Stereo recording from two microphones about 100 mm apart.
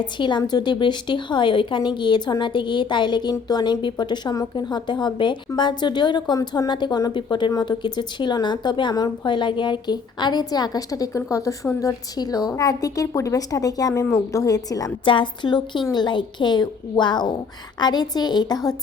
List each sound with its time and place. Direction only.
0.0 s a woman's voice: 50° left (ahead or behind)
15.0 s speech: 55° left (ahead or behind)